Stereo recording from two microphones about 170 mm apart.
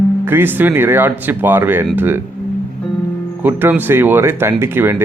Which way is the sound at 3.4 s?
10° right (ahead or behind).